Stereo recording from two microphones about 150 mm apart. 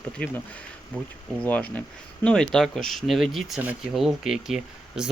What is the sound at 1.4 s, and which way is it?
Speech, 10° left (ahead or behind).